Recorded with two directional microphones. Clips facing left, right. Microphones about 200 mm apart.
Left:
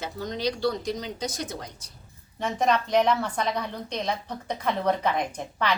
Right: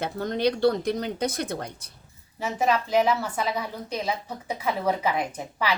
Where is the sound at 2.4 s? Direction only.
5° right (ahead or behind).